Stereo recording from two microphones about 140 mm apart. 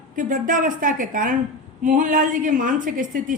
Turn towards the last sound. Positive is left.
turn(degrees=-70)  # may be behind; listen again after turning